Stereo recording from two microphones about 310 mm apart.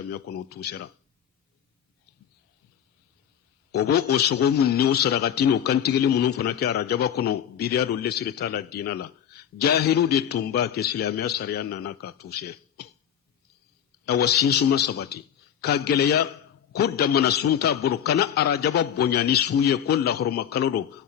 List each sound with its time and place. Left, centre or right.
0.4 s a man's voice: left
3.7 s a man's voice: left
14.1 s a man's voice: left